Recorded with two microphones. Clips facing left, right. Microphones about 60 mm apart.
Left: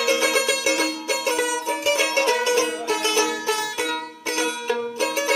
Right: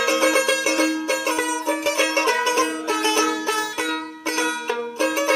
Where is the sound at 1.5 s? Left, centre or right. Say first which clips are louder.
Even; right.